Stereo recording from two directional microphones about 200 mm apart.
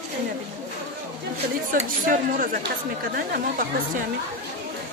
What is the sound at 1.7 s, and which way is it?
Speech, 40° right (ahead or behind).